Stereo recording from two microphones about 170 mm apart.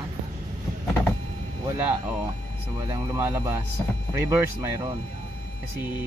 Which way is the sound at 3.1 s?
15° right (ahead or behind).